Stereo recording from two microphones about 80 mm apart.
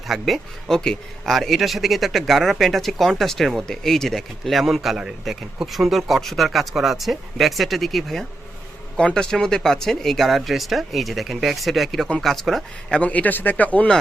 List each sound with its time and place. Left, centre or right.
0.1 s speech: centre
13.0 s speech: centre